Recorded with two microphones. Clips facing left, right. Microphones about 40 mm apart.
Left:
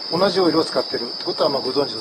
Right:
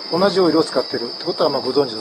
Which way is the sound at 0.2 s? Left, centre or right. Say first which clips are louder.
Right 2 dB; centre.